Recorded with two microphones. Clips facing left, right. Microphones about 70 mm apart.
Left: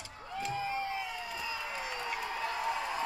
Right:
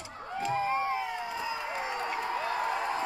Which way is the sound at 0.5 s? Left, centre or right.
Right.